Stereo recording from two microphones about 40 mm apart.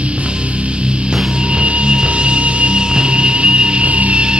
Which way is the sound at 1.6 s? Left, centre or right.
Right.